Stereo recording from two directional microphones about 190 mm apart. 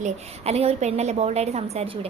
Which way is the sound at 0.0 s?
35° right (ahead or behind).